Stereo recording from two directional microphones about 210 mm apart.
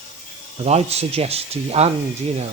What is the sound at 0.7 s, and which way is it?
Speech, 30° right (ahead or behind).